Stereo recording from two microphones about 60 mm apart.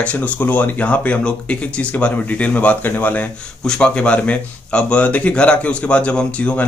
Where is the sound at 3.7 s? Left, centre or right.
Centre.